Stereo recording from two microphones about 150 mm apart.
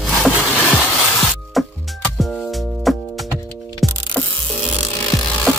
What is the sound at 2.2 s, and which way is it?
Music, 5° left (ahead or behind).